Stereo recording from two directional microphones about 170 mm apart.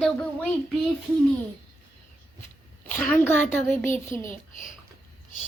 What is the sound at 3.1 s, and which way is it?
A child's voice, 10° left (ahead or behind).